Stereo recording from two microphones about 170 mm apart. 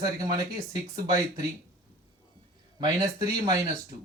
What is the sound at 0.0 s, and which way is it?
Speech, 20° right (ahead or behind).